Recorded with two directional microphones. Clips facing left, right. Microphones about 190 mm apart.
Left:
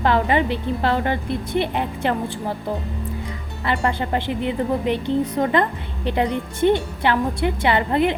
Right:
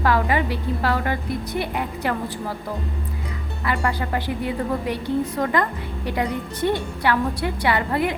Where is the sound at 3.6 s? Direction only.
25° left (ahead or behind).